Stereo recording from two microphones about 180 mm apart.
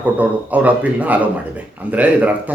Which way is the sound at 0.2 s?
10° right (ahead or behind).